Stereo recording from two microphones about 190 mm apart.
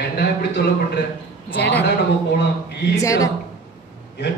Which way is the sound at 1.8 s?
60° left (ahead or behind).